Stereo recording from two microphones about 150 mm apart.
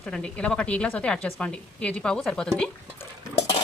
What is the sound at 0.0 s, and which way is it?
A woman's voice, 5° left (ahead or behind).